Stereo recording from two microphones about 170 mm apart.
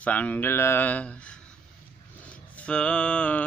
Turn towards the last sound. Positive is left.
turn(degrees=5)  # may be behind; listen again after turning